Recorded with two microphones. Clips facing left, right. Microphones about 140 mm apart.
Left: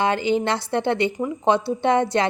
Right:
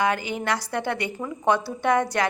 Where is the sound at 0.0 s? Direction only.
25° left (ahead or behind).